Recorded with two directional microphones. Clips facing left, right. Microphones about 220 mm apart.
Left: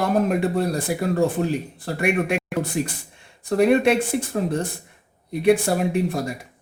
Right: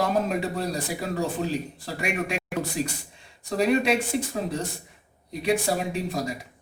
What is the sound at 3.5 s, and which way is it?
Speech, 55° left (ahead or behind).